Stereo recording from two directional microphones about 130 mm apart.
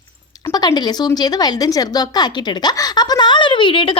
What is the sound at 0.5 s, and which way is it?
Speech, 30° left (ahead or behind).